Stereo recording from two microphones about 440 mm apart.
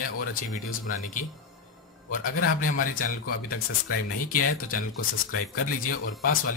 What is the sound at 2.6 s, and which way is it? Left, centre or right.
Speech, centre.